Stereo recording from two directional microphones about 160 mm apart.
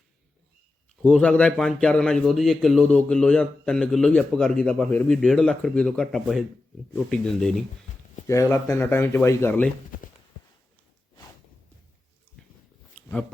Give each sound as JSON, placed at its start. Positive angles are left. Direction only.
{"t": 1.0, "sound": "a man's voice", "side_deg": 5}
{"t": 8.3, "sound": "speech", "side_deg": 20}
{"t": 12.9, "sound": "a sound", "side_deg": 10}